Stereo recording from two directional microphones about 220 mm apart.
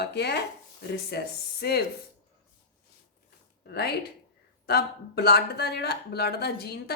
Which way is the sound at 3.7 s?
45° left (ahead or behind).